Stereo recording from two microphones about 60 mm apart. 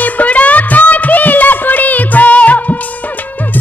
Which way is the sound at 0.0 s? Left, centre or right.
Left.